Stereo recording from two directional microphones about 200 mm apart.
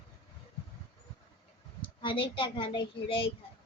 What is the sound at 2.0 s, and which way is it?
A child's voice, 25° left (ahead or behind).